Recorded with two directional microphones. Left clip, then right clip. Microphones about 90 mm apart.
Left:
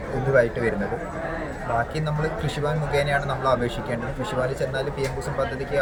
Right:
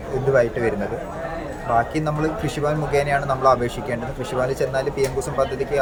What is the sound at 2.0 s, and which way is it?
Speech, 50° right (ahead or behind).